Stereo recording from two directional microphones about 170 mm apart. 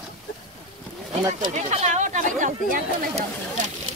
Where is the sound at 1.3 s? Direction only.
50° right (ahead or behind).